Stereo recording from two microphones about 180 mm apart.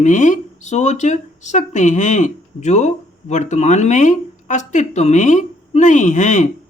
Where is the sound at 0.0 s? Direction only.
45° left (ahead or behind).